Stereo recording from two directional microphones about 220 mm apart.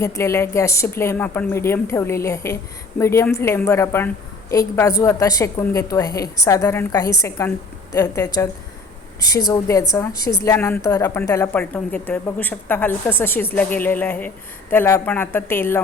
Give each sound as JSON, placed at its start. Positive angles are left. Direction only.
{"t": 0.0, "sound": "a woman's voice", "side_deg": 15}
{"t": 9.5, "sound": "a woman's voice", "side_deg": 15}